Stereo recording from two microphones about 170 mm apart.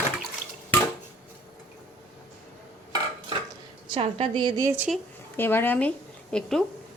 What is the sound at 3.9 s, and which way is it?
Speech, 30° right (ahead or behind).